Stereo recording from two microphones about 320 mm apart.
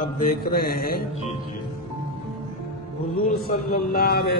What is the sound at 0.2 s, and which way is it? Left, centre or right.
Speech, left.